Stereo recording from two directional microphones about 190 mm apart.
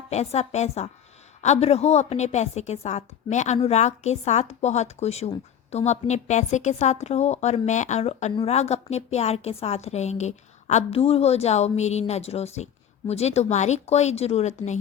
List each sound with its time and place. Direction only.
0.1 s a woman's voice: 35° left (ahead or behind)